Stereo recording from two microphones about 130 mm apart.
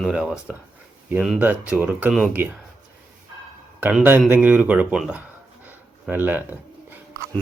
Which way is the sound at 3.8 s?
10° right (ahead or behind).